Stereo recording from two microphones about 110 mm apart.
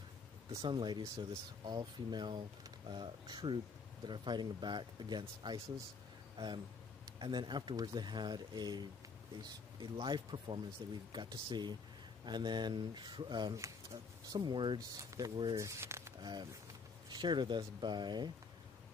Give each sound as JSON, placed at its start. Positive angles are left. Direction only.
{"t": 0.6, "sound": "speech", "side_deg": -45}
{"t": 6.3, "sound": "speech", "side_deg": -45}
{"t": 9.9, "sound": "speech", "side_deg": -50}
{"t": 13.6, "sound": "speech", "side_deg": -30}
{"t": 15.0, "sound": "speech", "side_deg": -30}
{"t": 16.2, "sound": "speech", "side_deg": -40}